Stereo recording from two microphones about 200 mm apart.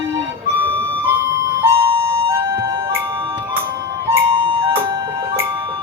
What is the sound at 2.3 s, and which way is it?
Music, 15° right (ahead or behind).